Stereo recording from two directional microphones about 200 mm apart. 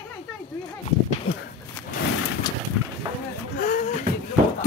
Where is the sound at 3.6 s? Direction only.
40° left (ahead or behind).